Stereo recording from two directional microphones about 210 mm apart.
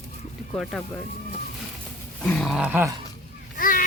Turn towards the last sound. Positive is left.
turn(degrees=40)  # may be behind; listen again after turning